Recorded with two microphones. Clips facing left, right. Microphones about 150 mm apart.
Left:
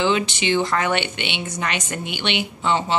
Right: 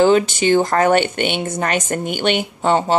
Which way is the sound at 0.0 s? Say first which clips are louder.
Right 7 dB; 45° right (ahead or behind).